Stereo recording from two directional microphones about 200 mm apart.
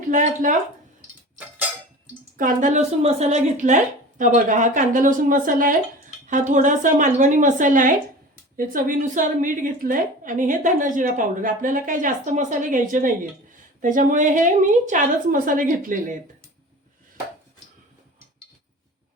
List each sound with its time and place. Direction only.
0.1 s a woman's voice: 40° right (ahead or behind)
2.4 s a woman's voice: 40° right (ahead or behind)